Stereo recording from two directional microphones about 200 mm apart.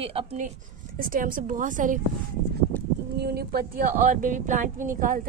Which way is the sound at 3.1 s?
50° right (ahead or behind).